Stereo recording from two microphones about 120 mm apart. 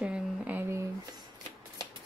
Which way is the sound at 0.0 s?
10° right (ahead or behind).